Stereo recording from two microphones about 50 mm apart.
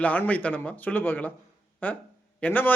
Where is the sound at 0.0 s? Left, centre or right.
Left.